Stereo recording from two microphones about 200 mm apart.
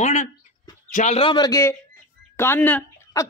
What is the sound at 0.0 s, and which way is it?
A man's voice, 35° left (ahead or behind).